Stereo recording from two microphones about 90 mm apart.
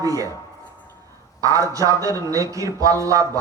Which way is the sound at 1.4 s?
40° right (ahead or behind).